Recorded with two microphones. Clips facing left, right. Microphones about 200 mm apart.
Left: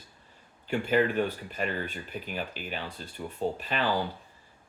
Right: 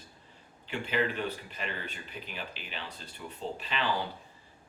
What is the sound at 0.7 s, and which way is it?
Speech, 50° left (ahead or behind).